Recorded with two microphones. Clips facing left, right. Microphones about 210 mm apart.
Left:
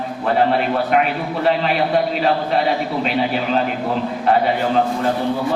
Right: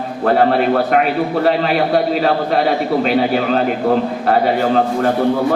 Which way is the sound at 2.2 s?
40° right (ahead or behind).